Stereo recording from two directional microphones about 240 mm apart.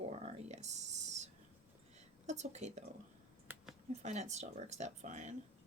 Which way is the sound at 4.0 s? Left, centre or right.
Right.